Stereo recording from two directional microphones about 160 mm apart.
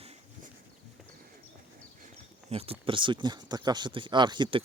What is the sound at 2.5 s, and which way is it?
Speech, 35° right (ahead or behind).